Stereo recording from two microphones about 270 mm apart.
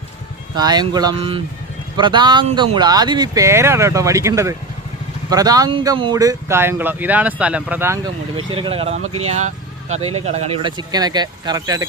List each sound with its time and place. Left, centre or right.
0.5 s speech: centre